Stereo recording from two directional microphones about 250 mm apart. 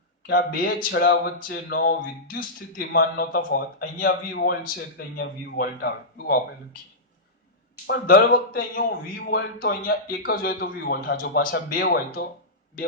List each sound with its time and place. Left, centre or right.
0.3 s speech: left
7.9 s speech: left